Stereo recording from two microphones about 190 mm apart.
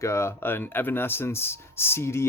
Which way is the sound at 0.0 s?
15° left (ahead or behind).